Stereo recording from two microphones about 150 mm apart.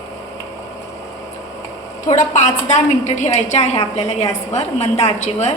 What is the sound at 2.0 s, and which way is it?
A woman's voice, 55° left (ahead or behind).